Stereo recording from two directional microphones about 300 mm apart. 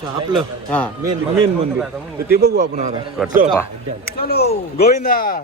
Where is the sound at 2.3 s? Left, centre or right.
Right.